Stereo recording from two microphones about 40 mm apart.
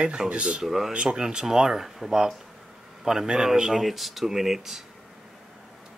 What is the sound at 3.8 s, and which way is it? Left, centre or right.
Speech, centre.